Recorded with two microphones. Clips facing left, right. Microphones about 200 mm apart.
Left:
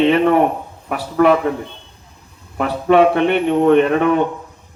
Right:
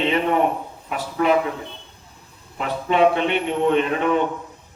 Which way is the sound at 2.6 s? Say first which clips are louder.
Left 5 dB; 55° left (ahead or behind).